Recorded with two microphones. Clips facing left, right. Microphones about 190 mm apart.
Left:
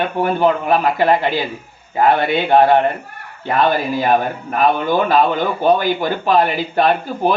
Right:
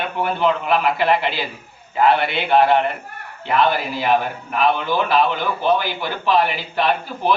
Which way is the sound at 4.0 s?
45° left (ahead or behind).